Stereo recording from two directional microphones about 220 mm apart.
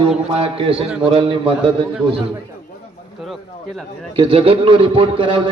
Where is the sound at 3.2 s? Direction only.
Centre (ahead or behind).